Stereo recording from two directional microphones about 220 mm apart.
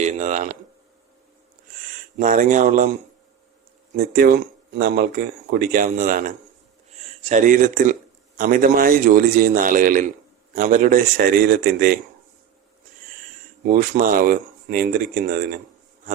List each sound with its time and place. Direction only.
0.0 s a man's voice: 30° right (ahead or behind)
2.1 s a man's voice: 35° right (ahead or behind)
3.9 s a man's voice: 40° right (ahead or behind)
13.7 s speech: 40° right (ahead or behind)